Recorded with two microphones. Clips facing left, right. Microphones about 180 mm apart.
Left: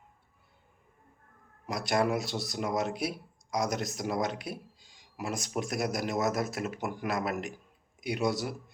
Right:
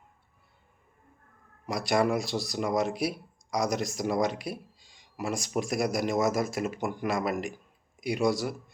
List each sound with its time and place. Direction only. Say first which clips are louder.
1.9 s speech: right 2 dB; 5° left (ahead or behind)